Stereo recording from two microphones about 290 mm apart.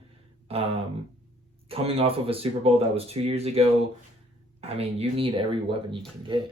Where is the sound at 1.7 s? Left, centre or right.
Centre.